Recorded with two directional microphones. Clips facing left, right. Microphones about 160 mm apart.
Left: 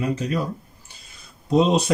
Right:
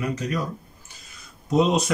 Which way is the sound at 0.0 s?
25° left (ahead or behind).